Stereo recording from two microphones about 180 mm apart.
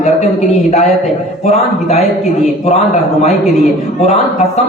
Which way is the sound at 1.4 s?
35° left (ahead or behind).